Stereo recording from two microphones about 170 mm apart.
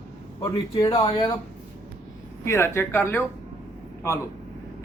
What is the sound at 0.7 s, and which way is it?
Speech, 25° left (ahead or behind).